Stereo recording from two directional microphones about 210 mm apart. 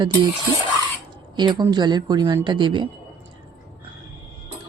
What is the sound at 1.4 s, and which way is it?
Speech, 20° right (ahead or behind).